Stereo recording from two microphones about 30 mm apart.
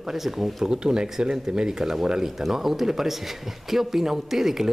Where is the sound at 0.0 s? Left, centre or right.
Centre.